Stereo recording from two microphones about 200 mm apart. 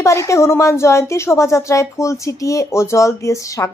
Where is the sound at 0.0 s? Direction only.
15° left (ahead or behind).